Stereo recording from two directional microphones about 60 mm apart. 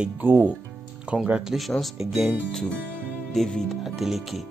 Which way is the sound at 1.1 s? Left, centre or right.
Right.